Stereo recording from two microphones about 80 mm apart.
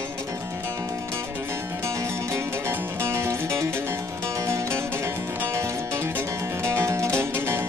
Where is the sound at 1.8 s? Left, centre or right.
Right.